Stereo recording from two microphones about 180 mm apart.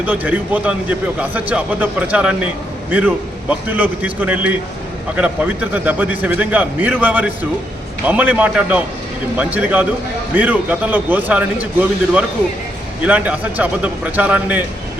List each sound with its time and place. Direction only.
0.0 s speech: 10° right (ahead or behind)
3.5 s speech: 10° right (ahead or behind)